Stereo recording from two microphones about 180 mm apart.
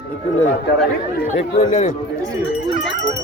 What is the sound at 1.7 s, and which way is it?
Speech, 40° left (ahead or behind).